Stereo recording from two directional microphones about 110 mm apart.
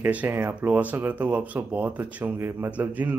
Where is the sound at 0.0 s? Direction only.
15° right (ahead or behind).